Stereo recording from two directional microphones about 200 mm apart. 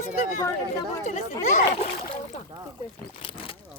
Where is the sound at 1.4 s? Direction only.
35° left (ahead or behind).